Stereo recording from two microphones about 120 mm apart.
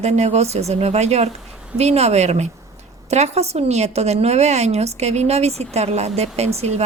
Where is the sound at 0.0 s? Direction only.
65° right (ahead or behind).